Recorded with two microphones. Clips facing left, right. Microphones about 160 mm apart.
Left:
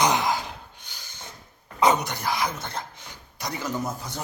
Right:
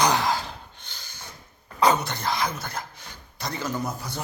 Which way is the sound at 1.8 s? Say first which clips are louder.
Even; 20° left (ahead or behind).